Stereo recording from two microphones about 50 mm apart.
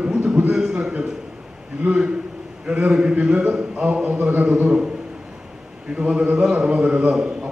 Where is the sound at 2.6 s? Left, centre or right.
Right.